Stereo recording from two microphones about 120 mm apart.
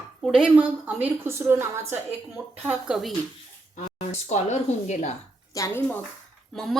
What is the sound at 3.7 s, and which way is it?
Speech, 70° left (ahead or behind).